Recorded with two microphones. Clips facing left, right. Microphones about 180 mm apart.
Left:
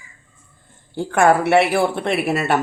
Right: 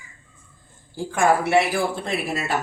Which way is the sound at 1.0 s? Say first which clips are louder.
Left 4 dB; 65° left (ahead or behind).